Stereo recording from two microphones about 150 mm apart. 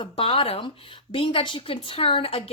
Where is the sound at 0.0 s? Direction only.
35° left (ahead or behind).